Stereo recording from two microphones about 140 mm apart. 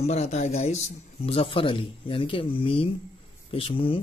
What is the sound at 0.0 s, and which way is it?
Speech, 50° left (ahead or behind).